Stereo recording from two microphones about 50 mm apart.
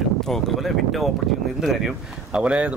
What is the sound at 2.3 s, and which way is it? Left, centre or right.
Speech, right.